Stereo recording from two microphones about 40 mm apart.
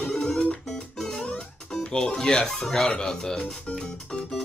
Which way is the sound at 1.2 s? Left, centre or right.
Left.